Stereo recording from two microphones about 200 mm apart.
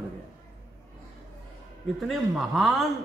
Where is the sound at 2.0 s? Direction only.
Centre (ahead or behind).